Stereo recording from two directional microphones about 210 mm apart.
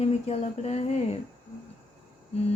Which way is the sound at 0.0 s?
30° left (ahead or behind).